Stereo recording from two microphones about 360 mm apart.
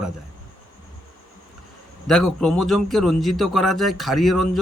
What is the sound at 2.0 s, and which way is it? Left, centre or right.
A man's voice, centre.